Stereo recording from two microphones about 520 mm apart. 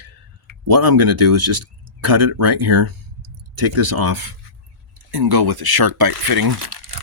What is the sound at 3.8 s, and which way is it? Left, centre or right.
Speech, right.